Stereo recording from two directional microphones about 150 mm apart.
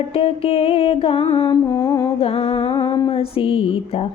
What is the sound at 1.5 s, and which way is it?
Mantra, 20° left (ahead or behind).